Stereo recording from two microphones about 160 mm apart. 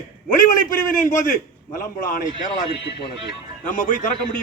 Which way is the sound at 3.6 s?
55° left (ahead or behind).